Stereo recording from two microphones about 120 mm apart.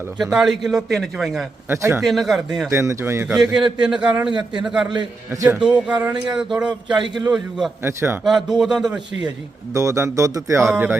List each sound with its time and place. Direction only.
0.2 s a man's voice: 5° right (ahead or behind)
1.7 s speech: 25° right (ahead or behind)
2.0 s a man's voice: centre (ahead or behind)
2.6 s speech: 25° right (ahead or behind)
3.2 s speech: 5° right (ahead or behind)
6.9 s a man's voice: 40° right (ahead or behind)
7.3 s a man's voice: 5° right (ahead or behind)
7.9 s speech: 20° right (ahead or behind)
8.2 s a man's voice: centre (ahead or behind)
9.7 s speech: 25° right (ahead or behind)